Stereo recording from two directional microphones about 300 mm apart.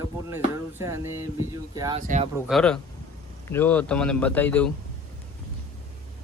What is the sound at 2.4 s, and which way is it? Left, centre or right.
Speech, centre.